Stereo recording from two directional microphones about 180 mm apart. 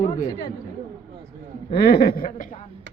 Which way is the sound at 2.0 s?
55° left (ahead or behind).